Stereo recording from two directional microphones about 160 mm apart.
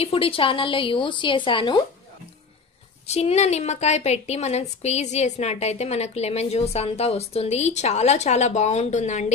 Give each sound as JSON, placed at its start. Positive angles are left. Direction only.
{"t": 0.0, "sound": "a woman's voice", "side_deg": 35}
{"t": 3.1, "sound": "a woman's voice", "side_deg": 40}